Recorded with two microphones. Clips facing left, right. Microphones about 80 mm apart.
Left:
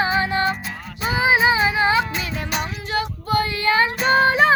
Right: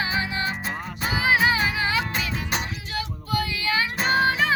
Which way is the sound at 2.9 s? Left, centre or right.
Left.